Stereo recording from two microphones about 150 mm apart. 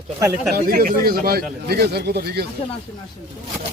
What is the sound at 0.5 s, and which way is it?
Speech, 75° right (ahead or behind).